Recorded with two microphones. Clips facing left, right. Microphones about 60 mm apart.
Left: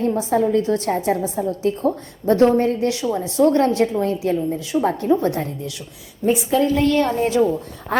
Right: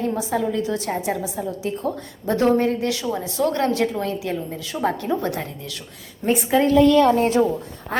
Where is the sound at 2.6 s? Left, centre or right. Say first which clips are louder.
Left 2 dB; right.